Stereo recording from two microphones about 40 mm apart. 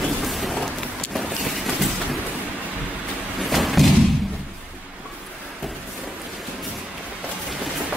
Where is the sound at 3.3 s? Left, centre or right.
Centre.